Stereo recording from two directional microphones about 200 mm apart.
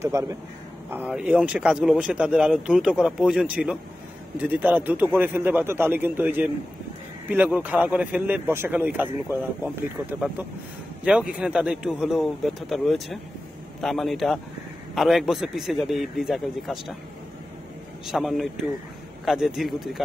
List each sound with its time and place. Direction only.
0.0 s speech: 15° right (ahead or behind)
11.1 s speech: 5° right (ahead or behind)
18.0 s speech: centre (ahead or behind)